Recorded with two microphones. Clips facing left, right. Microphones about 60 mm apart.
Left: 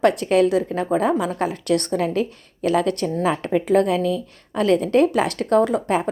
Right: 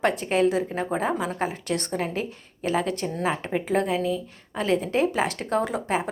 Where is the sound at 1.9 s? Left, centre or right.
Right.